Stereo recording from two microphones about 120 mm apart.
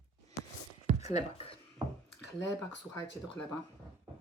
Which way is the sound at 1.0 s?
70° left (ahead or behind).